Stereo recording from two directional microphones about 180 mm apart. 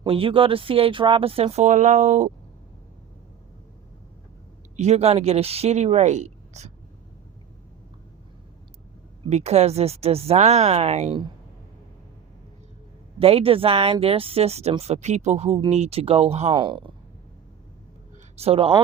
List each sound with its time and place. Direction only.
0.0 s speech: 30° right (ahead or behind)
4.8 s speech: 35° right (ahead or behind)
9.3 s speech: 35° right (ahead or behind)
13.1 s speech: 30° right (ahead or behind)
18.3 s speech: 35° right (ahead or behind)